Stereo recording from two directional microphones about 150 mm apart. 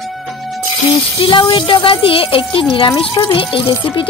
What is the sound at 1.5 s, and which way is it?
Speech, 35° left (ahead or behind).